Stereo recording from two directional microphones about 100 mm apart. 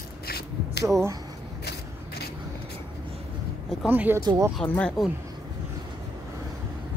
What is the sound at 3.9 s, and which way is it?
Speech, 20° right (ahead or behind).